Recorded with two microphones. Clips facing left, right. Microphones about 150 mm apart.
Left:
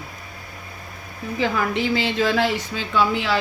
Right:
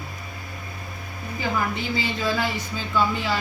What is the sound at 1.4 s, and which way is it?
Speech, 90° left.